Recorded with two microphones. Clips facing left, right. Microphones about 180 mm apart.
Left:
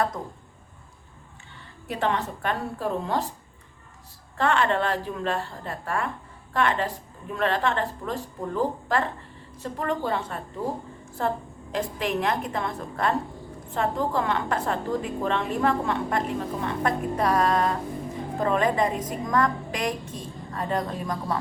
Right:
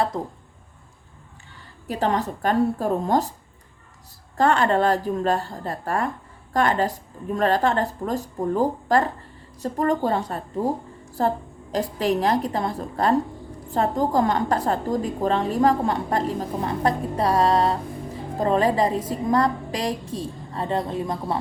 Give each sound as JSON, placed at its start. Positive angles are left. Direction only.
{"t": 1.9, "sound": "a woman's voice", "side_deg": -40}
{"t": 4.4, "sound": "a woman's voice", "side_deg": -40}